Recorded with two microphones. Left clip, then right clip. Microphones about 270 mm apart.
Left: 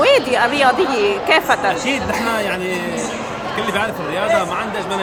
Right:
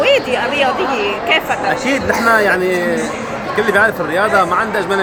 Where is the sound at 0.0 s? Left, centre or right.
Centre.